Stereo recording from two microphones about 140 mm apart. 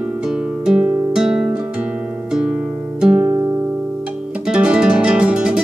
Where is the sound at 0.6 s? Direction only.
5° right (ahead or behind).